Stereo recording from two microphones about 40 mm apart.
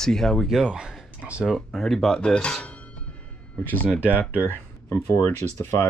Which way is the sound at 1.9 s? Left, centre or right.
Centre.